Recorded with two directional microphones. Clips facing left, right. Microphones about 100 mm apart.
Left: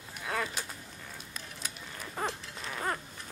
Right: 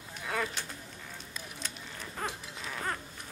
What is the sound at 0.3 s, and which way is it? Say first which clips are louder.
Bird: even; centre (ahead or behind).